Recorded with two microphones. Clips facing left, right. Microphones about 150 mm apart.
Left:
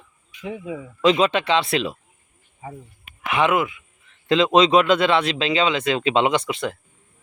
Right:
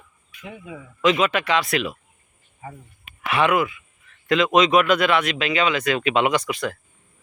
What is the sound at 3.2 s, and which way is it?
A man's voice, 20° left (ahead or behind).